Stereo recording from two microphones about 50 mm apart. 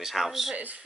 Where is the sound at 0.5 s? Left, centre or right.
Right.